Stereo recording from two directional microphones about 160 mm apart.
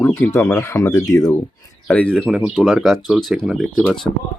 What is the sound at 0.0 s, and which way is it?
Speech, 15° left (ahead or behind).